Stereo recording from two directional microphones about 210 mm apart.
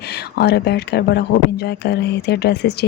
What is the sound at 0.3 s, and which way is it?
Speech, 50° left (ahead or behind).